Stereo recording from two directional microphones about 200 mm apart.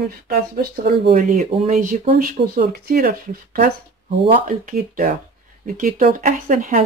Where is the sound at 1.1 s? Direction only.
35° right (ahead or behind).